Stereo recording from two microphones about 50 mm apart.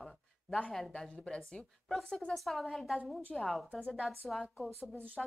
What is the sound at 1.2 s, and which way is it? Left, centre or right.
Speech, centre.